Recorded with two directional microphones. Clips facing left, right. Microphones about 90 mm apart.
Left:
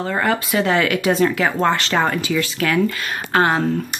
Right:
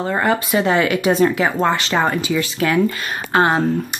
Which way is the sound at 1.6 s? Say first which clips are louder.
Left 1 dB; 10° right (ahead or behind).